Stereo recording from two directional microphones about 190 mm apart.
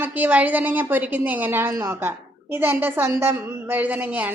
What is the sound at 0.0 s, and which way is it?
A woman's voice, 10° right (ahead or behind).